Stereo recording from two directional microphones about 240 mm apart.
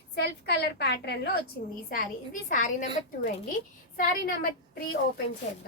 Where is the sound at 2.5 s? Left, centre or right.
Left.